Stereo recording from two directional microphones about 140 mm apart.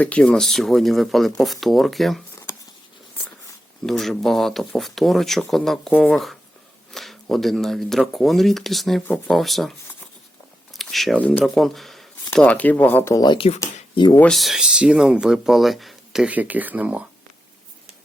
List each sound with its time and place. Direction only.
0.0 s speech: 10° left (ahead or behind)
3.8 s speech: centre (ahead or behind)
10.8 s a sound: centre (ahead or behind)
11.2 s speech: 10° left (ahead or behind)
13.1 s speech: 35° left (ahead or behind)
14.2 s speech: 5° left (ahead or behind)